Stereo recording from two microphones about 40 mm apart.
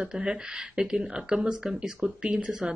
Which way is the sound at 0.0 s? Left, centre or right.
Centre.